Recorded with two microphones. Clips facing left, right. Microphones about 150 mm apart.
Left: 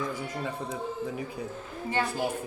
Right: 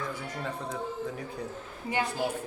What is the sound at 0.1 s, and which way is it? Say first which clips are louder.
Speech: left 3 dB; 10° left (ahead or behind).